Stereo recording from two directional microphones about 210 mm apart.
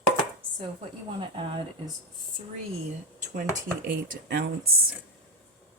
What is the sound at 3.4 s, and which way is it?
A woman's voice, 40° right (ahead or behind).